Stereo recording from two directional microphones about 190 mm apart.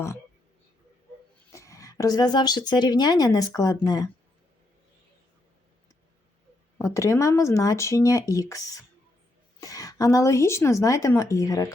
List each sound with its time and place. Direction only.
1.5 s speech: 15° left (ahead or behind)
6.7 s a woman's voice: 15° left (ahead or behind)